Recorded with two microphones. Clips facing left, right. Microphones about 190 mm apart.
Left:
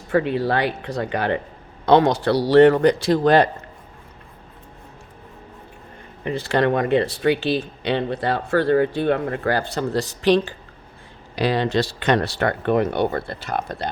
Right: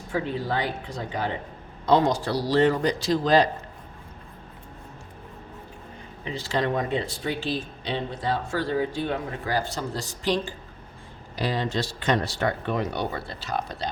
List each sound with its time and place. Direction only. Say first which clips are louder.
0.1 s speech: left 7 dB; 70° left (ahead or behind)
6.2 s speech: left 7 dB; 60° left (ahead or behind)